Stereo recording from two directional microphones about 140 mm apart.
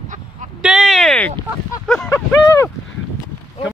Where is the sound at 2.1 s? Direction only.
20° left (ahead or behind).